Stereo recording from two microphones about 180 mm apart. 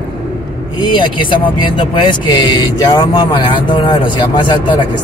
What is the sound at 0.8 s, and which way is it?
Speech, 25° left (ahead or behind).